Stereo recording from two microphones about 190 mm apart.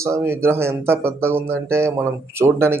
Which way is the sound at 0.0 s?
15° right (ahead or behind).